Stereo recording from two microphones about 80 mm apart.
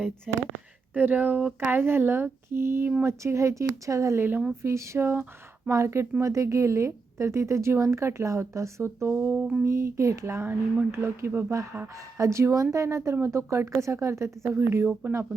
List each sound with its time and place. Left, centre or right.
0.3 s speech: centre
0.9 s a woman's voice: right
9.1 s speech: right
9.6 s a woman's voice: right